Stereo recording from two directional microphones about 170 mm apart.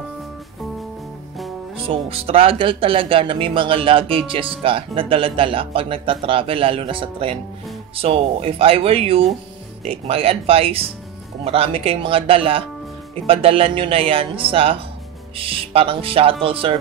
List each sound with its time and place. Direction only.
2.0 s speech: 35° right (ahead or behind)